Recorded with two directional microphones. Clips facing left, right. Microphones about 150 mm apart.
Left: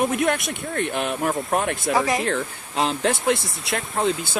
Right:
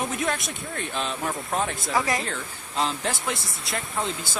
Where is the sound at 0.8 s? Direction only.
60° left (ahead or behind).